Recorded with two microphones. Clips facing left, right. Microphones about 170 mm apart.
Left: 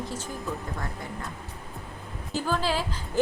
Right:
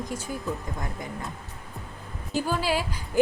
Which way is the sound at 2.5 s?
10° right (ahead or behind).